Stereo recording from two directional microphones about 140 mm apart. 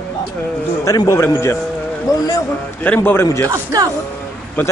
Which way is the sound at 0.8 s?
25° left (ahead or behind).